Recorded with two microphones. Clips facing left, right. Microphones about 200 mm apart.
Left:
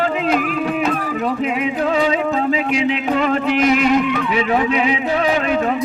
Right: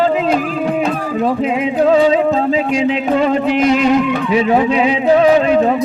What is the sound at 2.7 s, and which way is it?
A man's voice, 35° right (ahead or behind).